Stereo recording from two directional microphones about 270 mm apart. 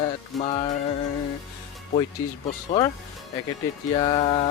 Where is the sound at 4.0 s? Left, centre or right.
Centre.